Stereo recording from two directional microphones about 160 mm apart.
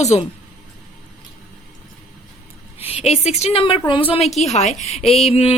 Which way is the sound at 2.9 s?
40° left (ahead or behind).